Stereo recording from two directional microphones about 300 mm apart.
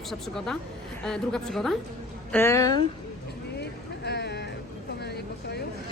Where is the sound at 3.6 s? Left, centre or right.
Left.